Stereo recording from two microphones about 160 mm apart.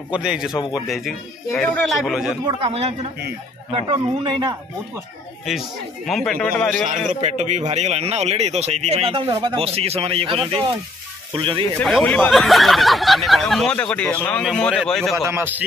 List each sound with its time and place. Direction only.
0.1 s speech: 5° right (ahead or behind)
0.5 s a man's voice: 25° left (ahead or behind)
0.8 s speech: centre (ahead or behind)
2.4 s a man's voice: 35° right (ahead or behind)
6.0 s speech: centre (ahead or behind)
7.1 s speech: 45° right (ahead or behind)
9.3 s speech: 25° right (ahead or behind)
11.8 s speech: 5° left (ahead or behind)
15.2 s a man's voice: 15° right (ahead or behind)